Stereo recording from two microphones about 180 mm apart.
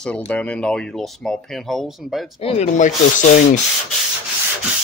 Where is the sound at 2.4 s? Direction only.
35° left (ahead or behind).